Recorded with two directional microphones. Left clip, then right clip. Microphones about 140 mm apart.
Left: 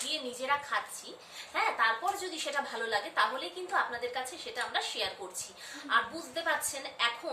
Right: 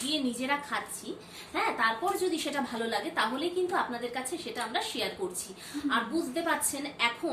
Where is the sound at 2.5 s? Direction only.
10° right (ahead or behind).